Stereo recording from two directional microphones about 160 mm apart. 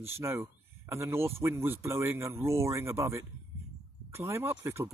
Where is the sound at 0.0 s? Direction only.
15° right (ahead or behind).